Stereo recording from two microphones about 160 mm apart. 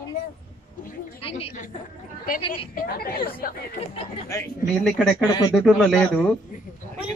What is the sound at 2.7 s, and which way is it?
Speech, 65° left (ahead or behind).